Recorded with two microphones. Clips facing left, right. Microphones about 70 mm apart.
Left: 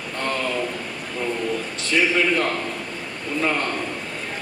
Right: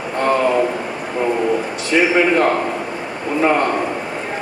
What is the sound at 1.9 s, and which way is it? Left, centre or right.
A man's voice, centre.